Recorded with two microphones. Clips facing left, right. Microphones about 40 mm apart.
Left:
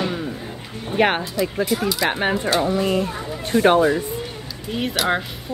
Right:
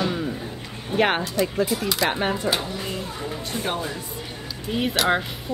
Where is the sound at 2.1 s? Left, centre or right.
Centre.